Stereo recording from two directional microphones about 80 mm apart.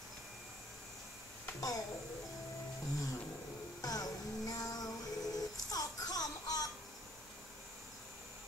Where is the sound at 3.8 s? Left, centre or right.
Left.